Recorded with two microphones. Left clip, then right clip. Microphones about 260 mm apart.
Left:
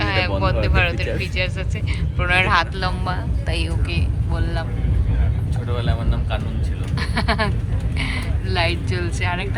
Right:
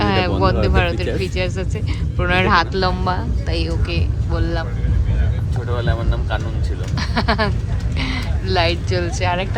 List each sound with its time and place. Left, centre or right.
0.0 s a sound: centre
0.4 s speech: centre
5.7 s speech: right
6.9 s speech: centre